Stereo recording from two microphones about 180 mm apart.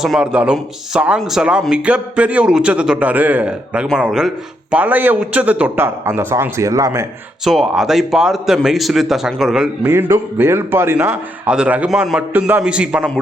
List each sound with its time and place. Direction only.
0.0 s a man's voice: 5° right (ahead or behind)
7.4 s a man's voice: centre (ahead or behind)